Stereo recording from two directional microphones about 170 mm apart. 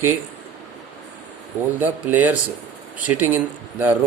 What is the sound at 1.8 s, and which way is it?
Speech, 10° right (ahead or behind).